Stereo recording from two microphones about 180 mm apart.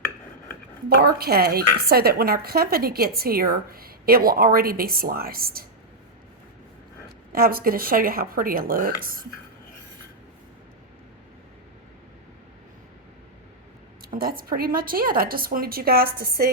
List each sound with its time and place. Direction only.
0.9 s speech: 60° right (ahead or behind)
7.3 s speech: 55° right (ahead or behind)
14.0 s speech: 55° right (ahead or behind)